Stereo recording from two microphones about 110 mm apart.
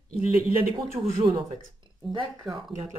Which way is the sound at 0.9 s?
65° right (ahead or behind).